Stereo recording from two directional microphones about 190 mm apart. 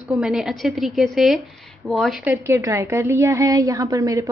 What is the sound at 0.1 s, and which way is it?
A woman's voice, centre (ahead or behind).